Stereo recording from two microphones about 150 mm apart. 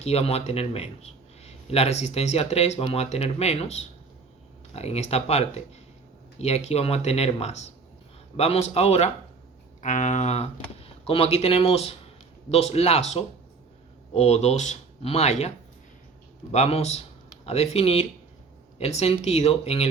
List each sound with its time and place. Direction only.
0.0 s a man's voice: 45° left (ahead or behind)
9.8 s a man's voice: 55° left (ahead or behind)